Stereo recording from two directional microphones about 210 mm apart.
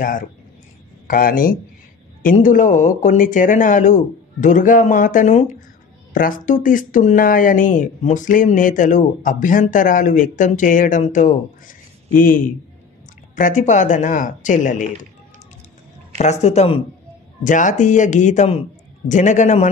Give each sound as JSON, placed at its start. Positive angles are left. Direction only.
{"t": 1.0, "sound": "speech", "side_deg": 40}
{"t": 16.2, "sound": "speech", "side_deg": 30}